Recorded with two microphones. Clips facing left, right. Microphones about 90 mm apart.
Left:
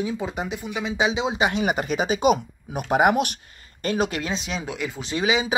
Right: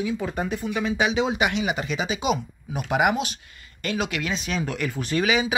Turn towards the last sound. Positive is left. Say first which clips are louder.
# even
turn(degrees=25)  # may be behind; listen again after turning